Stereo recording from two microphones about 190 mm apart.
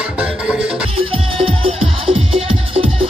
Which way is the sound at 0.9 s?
30° right (ahead or behind).